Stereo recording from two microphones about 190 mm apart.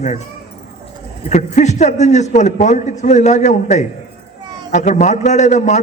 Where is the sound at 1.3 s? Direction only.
40° left (ahead or behind).